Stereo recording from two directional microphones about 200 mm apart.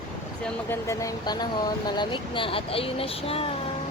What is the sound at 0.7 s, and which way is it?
Speech, 15° left (ahead or behind).